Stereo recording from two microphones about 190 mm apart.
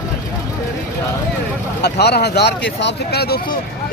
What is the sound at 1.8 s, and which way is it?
Speech, 60° left (ahead or behind).